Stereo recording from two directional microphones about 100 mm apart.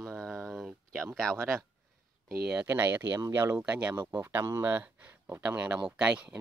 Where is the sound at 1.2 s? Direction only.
5° left (ahead or behind).